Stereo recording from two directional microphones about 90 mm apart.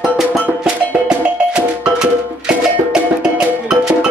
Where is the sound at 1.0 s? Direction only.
10° right (ahead or behind).